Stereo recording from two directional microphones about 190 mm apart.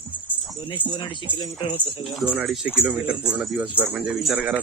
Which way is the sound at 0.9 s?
25° left (ahead or behind).